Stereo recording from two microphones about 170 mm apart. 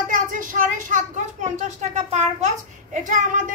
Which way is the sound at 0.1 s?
50° right (ahead or behind).